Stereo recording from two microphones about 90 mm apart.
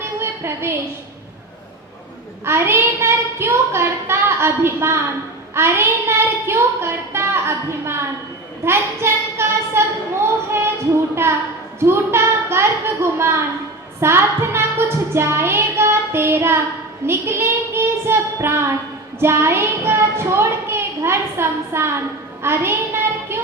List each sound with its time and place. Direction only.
0.0 s a sound: 30° right (ahead or behind)
2.4 s a child's voice: 25° right (ahead or behind)
10.5 s a sound: 30° right (ahead or behind)
11.9 s a child's voice: 25° right (ahead or behind)
14.0 s child singing: 30° right (ahead or behind)
17.1 s a child's voice: 30° right (ahead or behind)